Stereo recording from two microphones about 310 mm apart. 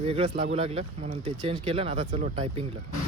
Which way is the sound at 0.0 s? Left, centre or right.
Centre.